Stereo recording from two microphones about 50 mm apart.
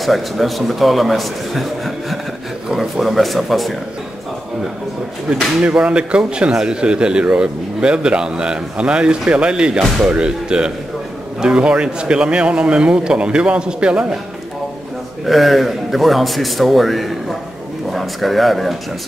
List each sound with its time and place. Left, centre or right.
0.0 s a man's voice: centre
5.6 s speech: right
15.2 s a man's voice: centre